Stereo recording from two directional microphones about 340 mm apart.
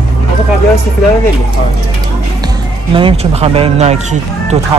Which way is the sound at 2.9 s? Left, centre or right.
Centre.